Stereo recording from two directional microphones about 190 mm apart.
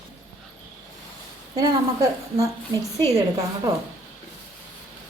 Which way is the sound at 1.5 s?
15° right (ahead or behind).